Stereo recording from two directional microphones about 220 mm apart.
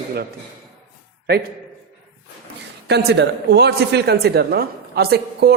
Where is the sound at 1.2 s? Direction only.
45° right (ahead or behind).